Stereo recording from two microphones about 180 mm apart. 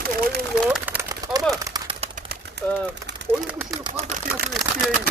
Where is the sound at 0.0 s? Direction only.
60° right (ahead or behind).